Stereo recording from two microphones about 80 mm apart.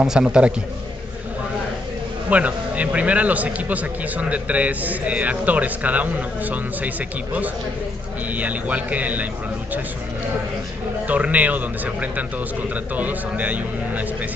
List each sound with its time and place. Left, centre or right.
0.0 s a man's voice: centre
2.2 s speech: centre
8.3 s speech: centre
11.1 s speech: centre